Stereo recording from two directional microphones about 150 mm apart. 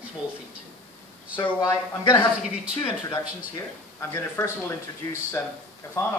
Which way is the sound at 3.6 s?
20° left (ahead or behind).